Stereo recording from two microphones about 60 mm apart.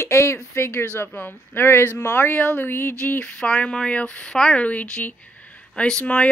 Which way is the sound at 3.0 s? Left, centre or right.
Left.